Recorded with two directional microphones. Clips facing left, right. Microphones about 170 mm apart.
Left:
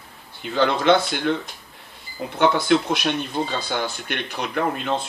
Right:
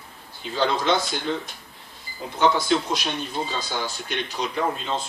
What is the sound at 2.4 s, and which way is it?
Speech, 60° left (ahead or behind).